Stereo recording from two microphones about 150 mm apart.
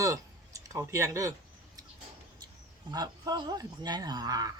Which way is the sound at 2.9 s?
25° right (ahead or behind).